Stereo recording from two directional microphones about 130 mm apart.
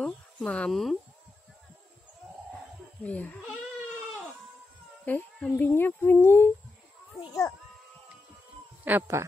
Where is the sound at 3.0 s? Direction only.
10° left (ahead or behind).